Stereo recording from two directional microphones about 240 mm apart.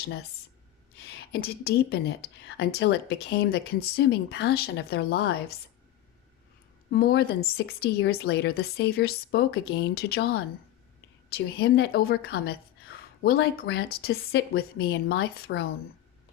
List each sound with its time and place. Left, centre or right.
0.0 s a woman's voice: left
6.9 s a woman's voice: left